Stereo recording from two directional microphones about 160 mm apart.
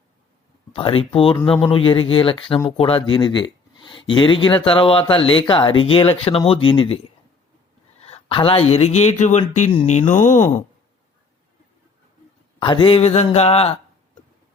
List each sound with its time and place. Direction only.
0.7 s speech: 35° left (ahead or behind)
8.0 s speech: 40° left (ahead or behind)
12.5 s speech: 30° left (ahead or behind)